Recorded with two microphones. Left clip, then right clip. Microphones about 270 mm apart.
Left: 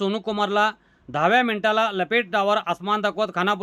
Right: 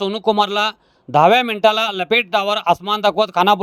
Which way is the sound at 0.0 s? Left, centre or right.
Centre.